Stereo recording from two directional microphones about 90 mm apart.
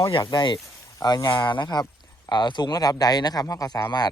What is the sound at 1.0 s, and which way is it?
Speech, 45° left (ahead or behind).